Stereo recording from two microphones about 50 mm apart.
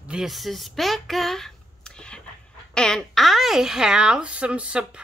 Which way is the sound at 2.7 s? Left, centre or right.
Centre.